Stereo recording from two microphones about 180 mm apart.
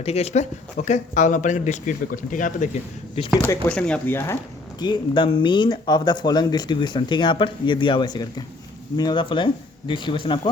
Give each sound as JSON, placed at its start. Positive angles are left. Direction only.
{"t": 0.0, "sound": "speech", "side_deg": 35}
{"t": 3.4, "sound": "speech", "side_deg": 10}
{"t": 4.8, "sound": "speech", "side_deg": 25}